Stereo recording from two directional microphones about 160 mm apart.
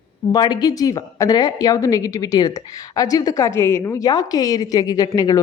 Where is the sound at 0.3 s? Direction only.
25° left (ahead or behind).